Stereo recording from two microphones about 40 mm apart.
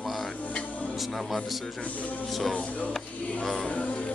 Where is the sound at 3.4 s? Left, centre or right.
Centre.